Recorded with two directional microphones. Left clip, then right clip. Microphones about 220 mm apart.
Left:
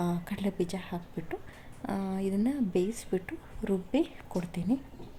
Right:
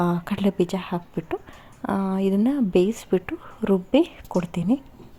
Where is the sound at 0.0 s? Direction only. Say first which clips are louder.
Right 10 dB; 20° right (ahead or behind).